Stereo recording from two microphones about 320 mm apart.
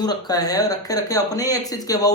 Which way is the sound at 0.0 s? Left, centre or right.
Centre.